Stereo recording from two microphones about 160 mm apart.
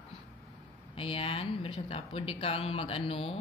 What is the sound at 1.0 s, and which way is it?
Mantra, 35° left (ahead or behind).